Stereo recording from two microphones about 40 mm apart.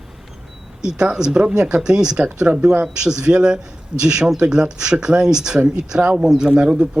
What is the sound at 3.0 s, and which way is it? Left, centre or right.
A man's voice, centre.